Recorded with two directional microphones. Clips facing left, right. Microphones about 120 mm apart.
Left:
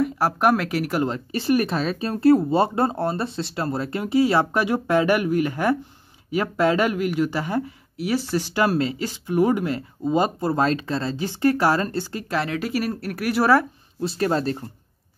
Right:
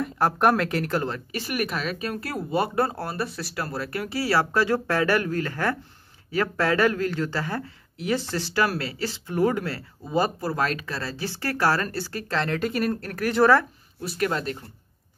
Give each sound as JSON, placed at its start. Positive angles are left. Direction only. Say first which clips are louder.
{"t": 0.0, "sound": "speech", "louder": "left 1 dB", "side_deg": 5}
{"t": 1.3, "sound": "speech", "louder": "left 9 dB", "side_deg": 30}
{"t": 14.0, "sound": "speech", "louder": "left 4 dB", "side_deg": 30}